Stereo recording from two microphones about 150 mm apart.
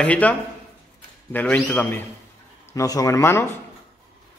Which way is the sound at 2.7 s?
25° left (ahead or behind).